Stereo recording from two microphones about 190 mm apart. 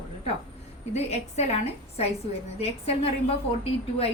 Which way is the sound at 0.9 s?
35° left (ahead or behind).